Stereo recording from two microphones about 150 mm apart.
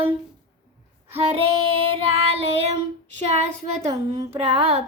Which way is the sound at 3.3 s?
45° right (ahead or behind).